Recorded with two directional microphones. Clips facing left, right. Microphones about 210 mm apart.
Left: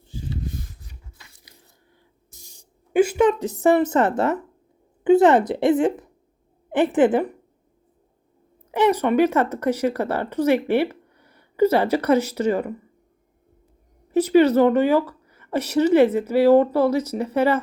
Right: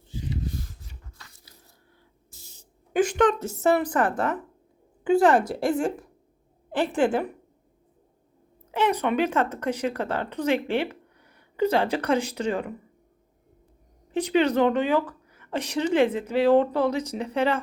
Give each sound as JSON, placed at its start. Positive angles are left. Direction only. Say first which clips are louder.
{"t": 1.5, "sound": "biting", "louder": "left 1 dB", "side_deg": 15}
{"t": 2.3, "sound": "a sound", "louder": "left 1 dB", "side_deg": 15}
{"t": 5.0, "sound": "a woman's voice", "louder": "left 5 dB", "side_deg": 20}
{"t": 8.7, "sound": "speech", "louder": "left 5 dB", "side_deg": 10}
{"t": 14.1, "sound": "speech", "louder": "left 7 dB", "side_deg": 5}